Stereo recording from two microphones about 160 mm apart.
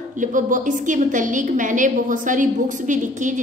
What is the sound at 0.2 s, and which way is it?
A woman's voice, 55° right (ahead or behind).